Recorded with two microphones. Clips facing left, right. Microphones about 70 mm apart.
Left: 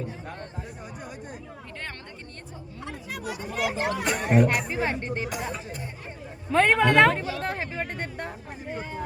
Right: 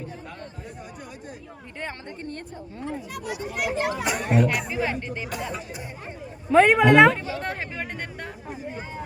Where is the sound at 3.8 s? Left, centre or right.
Centre.